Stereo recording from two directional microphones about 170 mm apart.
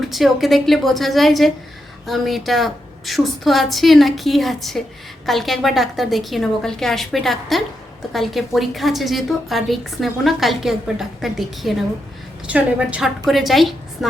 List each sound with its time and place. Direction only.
0.0 s a woman's voice: centre (ahead or behind)